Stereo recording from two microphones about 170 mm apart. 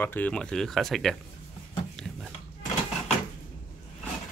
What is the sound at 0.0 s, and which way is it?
Speech, 10° left (ahead or behind).